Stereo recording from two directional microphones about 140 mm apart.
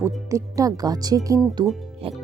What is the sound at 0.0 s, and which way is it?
Speech, 20° right (ahead or behind).